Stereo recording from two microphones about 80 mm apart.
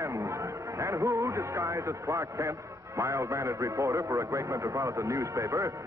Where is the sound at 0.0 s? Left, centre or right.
Right.